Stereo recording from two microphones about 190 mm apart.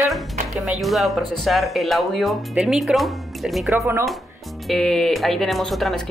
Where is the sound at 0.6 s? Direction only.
Centre (ahead or behind).